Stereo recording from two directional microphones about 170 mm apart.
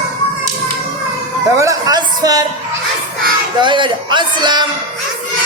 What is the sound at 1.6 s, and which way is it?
Music, 20° right (ahead or behind).